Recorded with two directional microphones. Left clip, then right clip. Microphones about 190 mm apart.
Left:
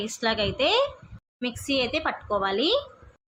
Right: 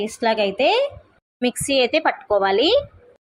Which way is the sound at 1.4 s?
30° right (ahead or behind).